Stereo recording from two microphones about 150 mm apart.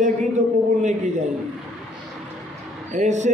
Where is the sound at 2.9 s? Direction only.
55° right (ahead or behind).